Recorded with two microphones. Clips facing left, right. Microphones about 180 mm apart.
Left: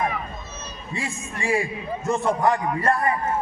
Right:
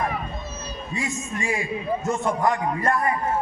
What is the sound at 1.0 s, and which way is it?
A man's voice, 35° left (ahead or behind).